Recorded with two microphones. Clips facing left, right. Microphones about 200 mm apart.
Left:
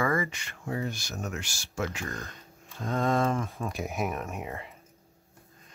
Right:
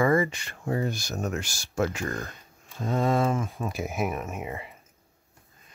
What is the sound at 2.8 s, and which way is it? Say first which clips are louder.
Speech: right 2 dB; 10° right (ahead or behind).